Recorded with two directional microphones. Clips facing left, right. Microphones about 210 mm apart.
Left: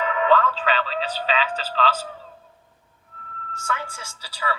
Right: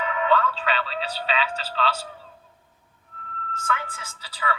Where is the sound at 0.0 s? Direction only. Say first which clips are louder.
Left 3 dB; 35° left (ahead or behind).